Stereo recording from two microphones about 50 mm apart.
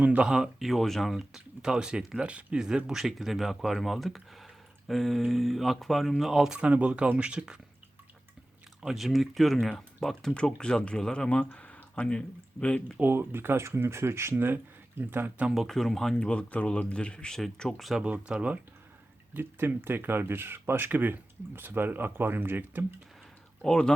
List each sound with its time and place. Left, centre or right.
0.2 s speech: centre
0.7 s speech: centre
1.1 s speech: centre
6.5 s speech: right
8.8 s speech: centre
10.3 s speech: centre
13.0 s speech: right
14.3 s speech: right
15.5 s speech: centre
16.1 s speech: centre
17.3 s speech: centre
18.0 s speech: centre
19.3 s speech: right
23.6 s speech: centre